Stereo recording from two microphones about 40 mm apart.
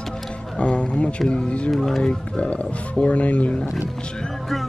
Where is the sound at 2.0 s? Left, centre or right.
Left.